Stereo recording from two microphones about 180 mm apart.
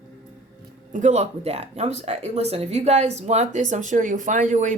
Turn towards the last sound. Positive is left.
turn(degrees=-45)  # may be behind; listen again after turning